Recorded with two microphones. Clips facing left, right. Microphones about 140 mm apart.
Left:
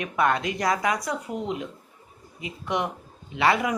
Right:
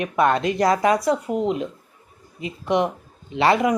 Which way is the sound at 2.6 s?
20° right (ahead or behind).